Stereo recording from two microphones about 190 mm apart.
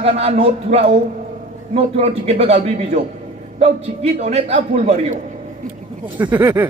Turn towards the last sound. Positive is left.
turn(degrees=-10)  # may be behind; listen again after turning